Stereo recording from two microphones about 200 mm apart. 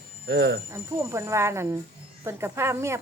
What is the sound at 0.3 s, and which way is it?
Speech, 55° right (ahead or behind).